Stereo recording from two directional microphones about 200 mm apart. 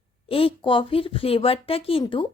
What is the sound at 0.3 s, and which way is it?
A woman's voice, 25° left (ahead or behind).